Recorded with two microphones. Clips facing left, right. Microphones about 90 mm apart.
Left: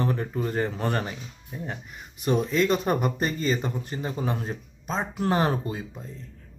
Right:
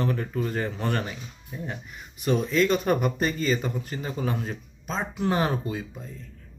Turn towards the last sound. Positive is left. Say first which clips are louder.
# right 1 dB
turn(degrees=35)  # may be behind; listen again after turning